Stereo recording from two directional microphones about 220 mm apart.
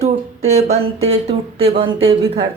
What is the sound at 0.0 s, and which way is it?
Speech, 30° right (ahead or behind).